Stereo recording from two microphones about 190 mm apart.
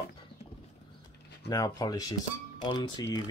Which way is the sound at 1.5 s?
20° left (ahead or behind).